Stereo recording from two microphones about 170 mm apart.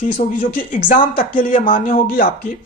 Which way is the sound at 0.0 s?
45° left (ahead or behind).